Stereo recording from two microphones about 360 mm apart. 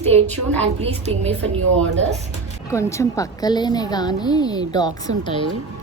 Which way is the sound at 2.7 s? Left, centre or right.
Centre.